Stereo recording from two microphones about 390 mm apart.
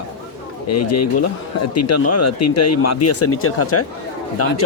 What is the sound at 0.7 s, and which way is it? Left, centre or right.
Speech, left.